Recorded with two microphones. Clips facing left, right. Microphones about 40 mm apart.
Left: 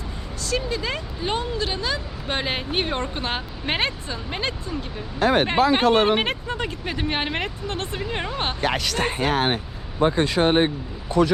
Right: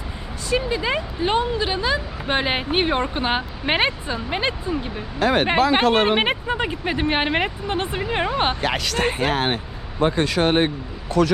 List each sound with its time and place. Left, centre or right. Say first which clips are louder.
0.4 s speech: right 4 dB; centre
5.2 s speech: even; right
5.8 s speech: even; right
6.1 s speech: right 4 dB; centre
8.6 s speech: right 1 dB; right
9.1 s speech: even; right
10.0 s speech: even; right
11.2 s speech: even; right